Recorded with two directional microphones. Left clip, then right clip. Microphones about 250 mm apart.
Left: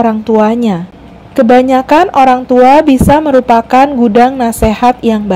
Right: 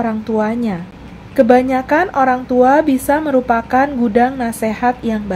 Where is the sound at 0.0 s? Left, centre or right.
Left.